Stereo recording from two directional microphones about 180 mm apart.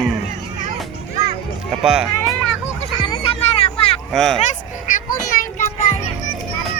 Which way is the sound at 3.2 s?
30° left (ahead or behind).